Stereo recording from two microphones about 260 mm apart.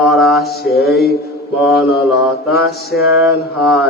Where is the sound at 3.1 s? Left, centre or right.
Centre.